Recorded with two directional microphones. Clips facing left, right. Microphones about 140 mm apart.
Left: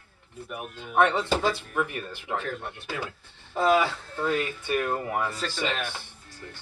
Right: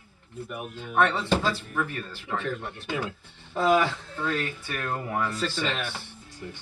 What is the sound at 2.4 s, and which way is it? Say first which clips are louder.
Speech: right 2 dB; 5° left (ahead or behind).